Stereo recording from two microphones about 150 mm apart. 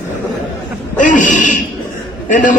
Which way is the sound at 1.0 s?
60° left (ahead or behind).